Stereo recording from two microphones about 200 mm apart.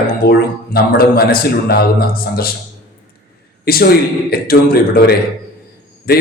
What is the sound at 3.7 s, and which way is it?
A man's voice, 50° left (ahead or behind).